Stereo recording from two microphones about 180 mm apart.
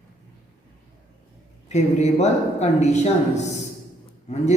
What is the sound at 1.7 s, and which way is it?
Speech, 40° left (ahead or behind).